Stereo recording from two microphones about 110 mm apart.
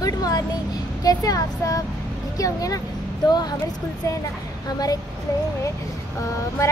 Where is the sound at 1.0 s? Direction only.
35° left (ahead or behind).